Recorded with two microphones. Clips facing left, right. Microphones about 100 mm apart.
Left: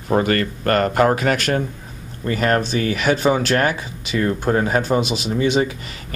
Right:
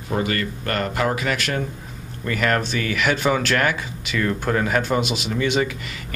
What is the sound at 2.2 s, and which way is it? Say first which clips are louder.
Speech: left 3 dB; 30° left (ahead or behind).